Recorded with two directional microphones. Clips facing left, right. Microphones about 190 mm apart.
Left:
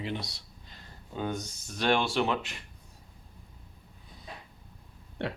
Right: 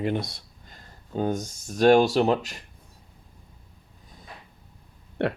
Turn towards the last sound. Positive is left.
turn(degrees=-60)  # may be behind; listen again after turning